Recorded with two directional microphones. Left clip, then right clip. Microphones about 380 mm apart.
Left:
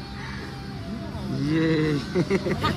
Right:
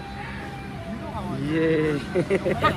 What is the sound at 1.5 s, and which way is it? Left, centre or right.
Speech, right.